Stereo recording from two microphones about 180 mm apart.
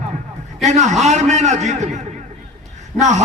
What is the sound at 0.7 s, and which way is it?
A man's voice, 40° right (ahead or behind).